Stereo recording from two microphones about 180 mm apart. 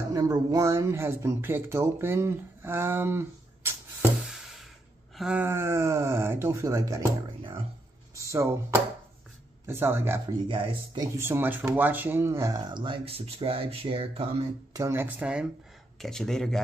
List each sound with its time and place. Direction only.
0.1 s speech: 20° right (ahead or behind)
4.2 s a sound: centre (ahead or behind)
5.1 s speech: 5° right (ahead or behind)
8.1 s speech: 15° right (ahead or behind)
10.5 s speech: 30° right (ahead or behind)
11.1 s speech: 15° right (ahead or behind); by 14.5 s 35° right (ahead or behind)
14.7 s speech: 15° right (ahead or behind); by 16.5 s centre (ahead or behind)